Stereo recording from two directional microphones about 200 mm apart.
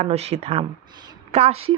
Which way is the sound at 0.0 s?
30° right (ahead or behind).